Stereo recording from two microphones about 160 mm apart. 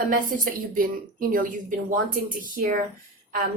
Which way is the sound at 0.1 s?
60° right (ahead or behind).